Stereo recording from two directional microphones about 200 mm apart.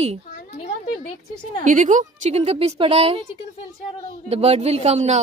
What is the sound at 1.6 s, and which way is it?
A woman's voice, 40° right (ahead or behind).